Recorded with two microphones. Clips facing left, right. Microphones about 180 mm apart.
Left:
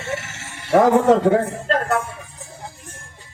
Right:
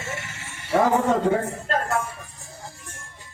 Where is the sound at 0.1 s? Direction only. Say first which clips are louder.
Left 6 dB; 80° left.